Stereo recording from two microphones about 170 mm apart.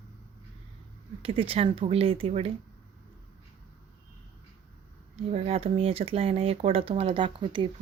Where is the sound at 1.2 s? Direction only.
35° right (ahead or behind).